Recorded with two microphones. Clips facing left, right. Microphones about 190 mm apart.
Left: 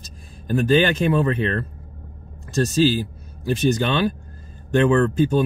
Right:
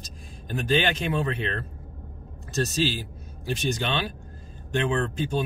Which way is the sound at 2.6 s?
40° left (ahead or behind).